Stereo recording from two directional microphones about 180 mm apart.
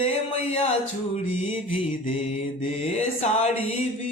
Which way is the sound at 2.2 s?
35° left (ahead or behind).